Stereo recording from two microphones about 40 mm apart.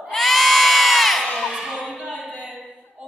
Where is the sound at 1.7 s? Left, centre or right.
Right.